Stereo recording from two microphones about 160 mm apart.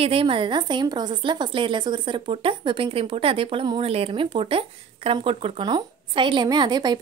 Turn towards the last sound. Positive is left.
turn(degrees=-25)  # may be behind; listen again after turning